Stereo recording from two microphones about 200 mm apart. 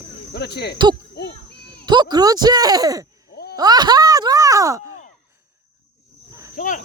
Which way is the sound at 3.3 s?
50° left (ahead or behind).